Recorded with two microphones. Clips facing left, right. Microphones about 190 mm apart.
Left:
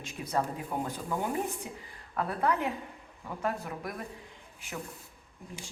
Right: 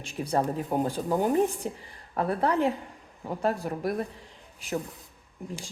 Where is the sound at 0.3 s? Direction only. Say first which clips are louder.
Right 5 dB; 30° right (ahead or behind).